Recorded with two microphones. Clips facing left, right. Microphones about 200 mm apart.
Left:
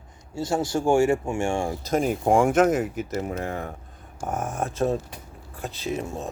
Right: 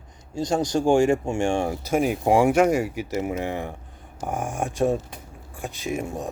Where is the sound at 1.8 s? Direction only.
10° right (ahead or behind).